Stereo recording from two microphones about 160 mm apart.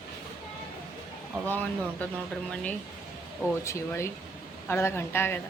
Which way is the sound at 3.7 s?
15° left (ahead or behind).